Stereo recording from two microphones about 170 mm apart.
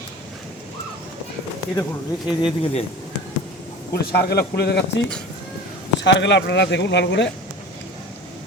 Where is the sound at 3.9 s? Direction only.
65° left (ahead or behind).